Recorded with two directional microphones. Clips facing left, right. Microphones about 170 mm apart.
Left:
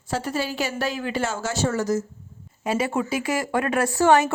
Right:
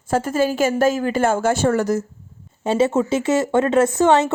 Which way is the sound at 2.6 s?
25° right (ahead or behind).